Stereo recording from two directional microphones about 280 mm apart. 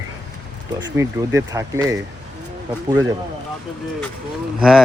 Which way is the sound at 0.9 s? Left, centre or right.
Centre.